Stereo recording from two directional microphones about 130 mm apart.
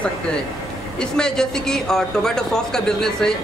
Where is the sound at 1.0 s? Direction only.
5° left (ahead or behind).